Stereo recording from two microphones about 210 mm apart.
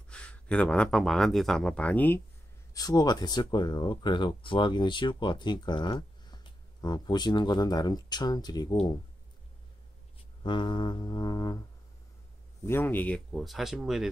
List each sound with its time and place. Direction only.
0.1 s speech: 5° left (ahead or behind)
10.4 s speech: 20° left (ahead or behind)
12.6 s speech: 10° left (ahead or behind)